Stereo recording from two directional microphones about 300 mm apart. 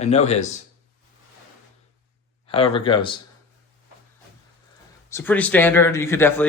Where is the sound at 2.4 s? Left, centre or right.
Centre.